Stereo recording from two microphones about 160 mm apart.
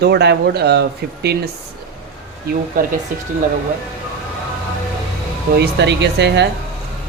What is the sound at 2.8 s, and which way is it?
Speech, 60° right (ahead or behind).